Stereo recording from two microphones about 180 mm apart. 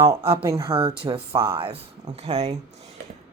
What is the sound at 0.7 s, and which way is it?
A woman's voice, 30° right (ahead or behind).